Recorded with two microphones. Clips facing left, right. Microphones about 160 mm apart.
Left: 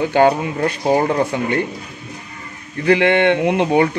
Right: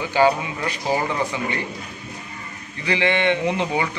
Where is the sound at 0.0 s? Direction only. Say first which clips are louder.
Left 4 dB; 55° left (ahead or behind).